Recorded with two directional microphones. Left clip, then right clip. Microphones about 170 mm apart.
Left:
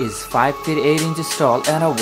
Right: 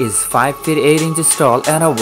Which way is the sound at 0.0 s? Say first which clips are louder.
Right 3 dB; 20° right (ahead or behind).